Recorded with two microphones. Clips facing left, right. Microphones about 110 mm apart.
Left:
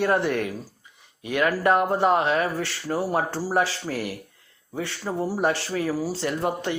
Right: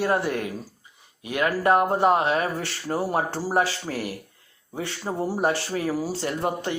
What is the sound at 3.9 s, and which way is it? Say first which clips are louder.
Speech: left 1 dB; 50° right (ahead or behind).